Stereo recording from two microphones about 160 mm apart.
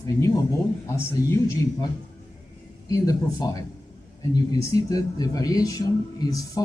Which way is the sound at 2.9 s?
20° left (ahead or behind).